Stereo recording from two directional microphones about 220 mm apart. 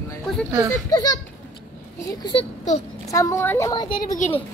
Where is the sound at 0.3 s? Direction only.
Centre (ahead or behind).